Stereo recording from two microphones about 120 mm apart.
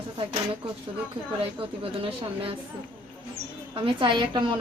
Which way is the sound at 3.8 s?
40° right (ahead or behind).